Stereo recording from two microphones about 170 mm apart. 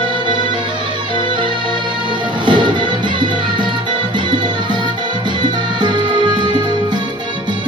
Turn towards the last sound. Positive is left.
turn(degrees=-25)  # may be behind; listen again after turning